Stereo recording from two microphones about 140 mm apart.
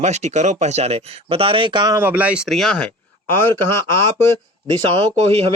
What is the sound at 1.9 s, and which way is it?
Speech, 15° right (ahead or behind).